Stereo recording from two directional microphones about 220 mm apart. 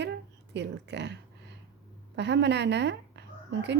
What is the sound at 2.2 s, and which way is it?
A woman's voice, 50° right (ahead or behind).